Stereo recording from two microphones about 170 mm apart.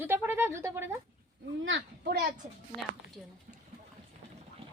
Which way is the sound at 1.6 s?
65° right (ahead or behind).